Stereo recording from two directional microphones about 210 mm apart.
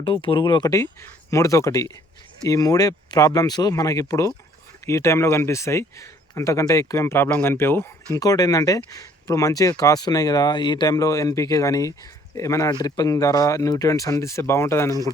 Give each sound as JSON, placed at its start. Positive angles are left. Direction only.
{"t": 0.0, "sound": "speech", "side_deg": 25}